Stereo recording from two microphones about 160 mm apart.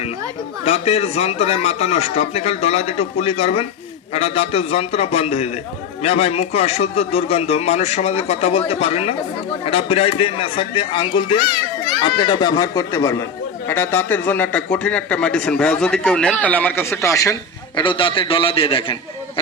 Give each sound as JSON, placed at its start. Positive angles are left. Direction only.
{"t": 0.6, "sound": "speech", "side_deg": 40}
{"t": 17.7, "sound": "speech", "side_deg": 30}